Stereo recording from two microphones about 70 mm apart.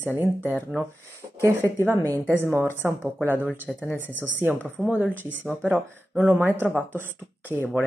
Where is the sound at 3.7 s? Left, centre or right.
Centre.